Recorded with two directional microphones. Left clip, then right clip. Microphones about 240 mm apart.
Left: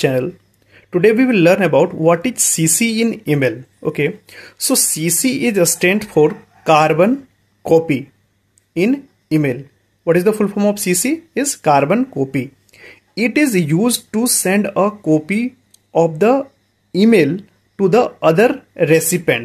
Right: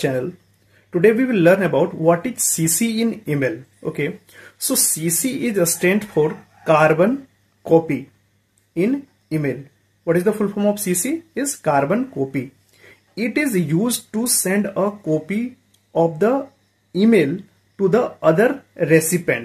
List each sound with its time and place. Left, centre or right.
0.8 s speech: left